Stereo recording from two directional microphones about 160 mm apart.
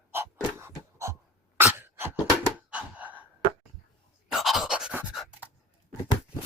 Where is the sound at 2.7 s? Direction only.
10° right (ahead or behind).